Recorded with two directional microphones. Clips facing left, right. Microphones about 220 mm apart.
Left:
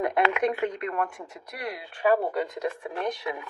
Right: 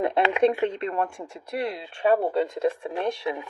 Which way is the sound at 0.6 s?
30° right (ahead or behind).